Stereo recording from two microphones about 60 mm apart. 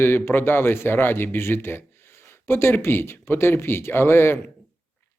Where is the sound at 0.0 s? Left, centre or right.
Left.